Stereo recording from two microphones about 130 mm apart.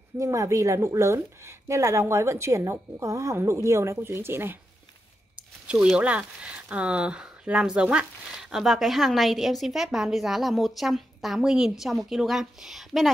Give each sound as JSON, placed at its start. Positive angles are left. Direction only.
{"t": 0.2, "sound": "a woman's voice", "side_deg": -25}